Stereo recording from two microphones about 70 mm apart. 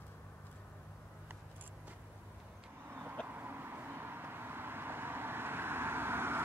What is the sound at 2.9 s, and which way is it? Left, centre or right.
Vehicle, right.